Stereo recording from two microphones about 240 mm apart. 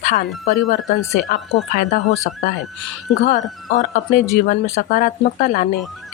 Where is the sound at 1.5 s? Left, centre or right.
Left.